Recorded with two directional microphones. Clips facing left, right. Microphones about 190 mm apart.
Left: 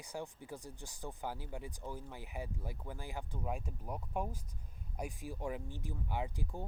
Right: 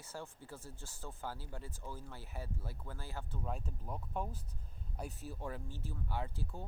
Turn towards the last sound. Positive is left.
turn(degrees=15)  # may be behind; listen again after turning